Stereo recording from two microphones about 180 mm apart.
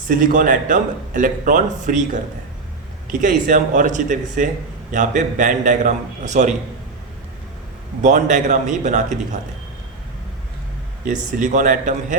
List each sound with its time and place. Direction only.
0.1 s speech: 50° right (ahead or behind)
3.1 s speech: 45° right (ahead or behind)
8.0 s speech: 45° right (ahead or behind)
11.0 s speech: 45° right (ahead or behind)